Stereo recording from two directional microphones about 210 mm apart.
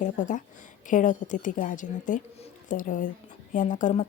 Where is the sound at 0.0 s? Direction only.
35° left (ahead or behind).